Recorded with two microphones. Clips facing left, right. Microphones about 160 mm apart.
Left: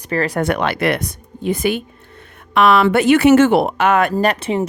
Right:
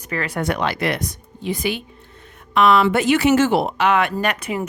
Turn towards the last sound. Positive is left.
turn(degrees=30)  # may be behind; listen again after turning